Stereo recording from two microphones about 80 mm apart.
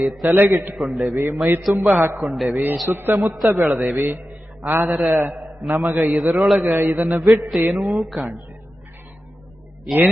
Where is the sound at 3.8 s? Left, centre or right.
Right.